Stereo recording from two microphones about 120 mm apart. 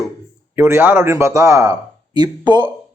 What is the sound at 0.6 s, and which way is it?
A man's voice, 20° right (ahead or behind).